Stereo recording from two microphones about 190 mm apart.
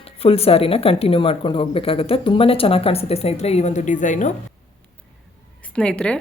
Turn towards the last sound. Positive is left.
turn(degrees=5)  # may be behind; listen again after turning